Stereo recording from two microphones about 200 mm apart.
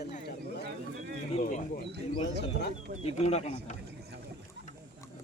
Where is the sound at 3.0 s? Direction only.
30° left (ahead or behind).